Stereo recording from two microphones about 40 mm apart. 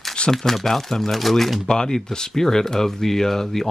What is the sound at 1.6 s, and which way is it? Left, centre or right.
Speech, centre.